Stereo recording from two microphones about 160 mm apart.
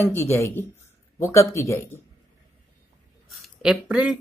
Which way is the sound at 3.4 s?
5° right (ahead or behind).